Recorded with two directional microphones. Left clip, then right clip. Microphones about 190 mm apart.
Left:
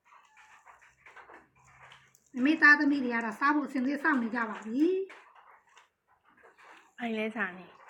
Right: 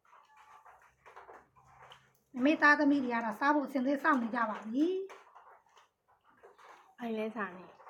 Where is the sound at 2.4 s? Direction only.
30° right (ahead or behind).